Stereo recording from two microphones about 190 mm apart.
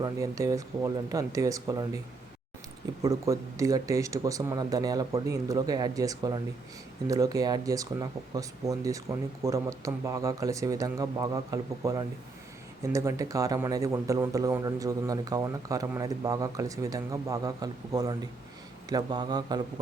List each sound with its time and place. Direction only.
0.0 s speech: 15° right (ahead or behind)
3.0 s speech: 15° right (ahead or behind)